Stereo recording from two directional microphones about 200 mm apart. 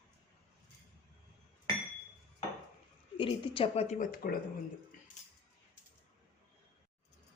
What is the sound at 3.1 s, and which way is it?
Speech, 25° left (ahead or behind).